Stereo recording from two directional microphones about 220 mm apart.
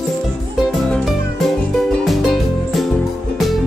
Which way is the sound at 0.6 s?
Centre (ahead or behind).